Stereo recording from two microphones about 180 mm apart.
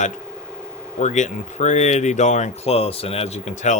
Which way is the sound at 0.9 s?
40° left (ahead or behind).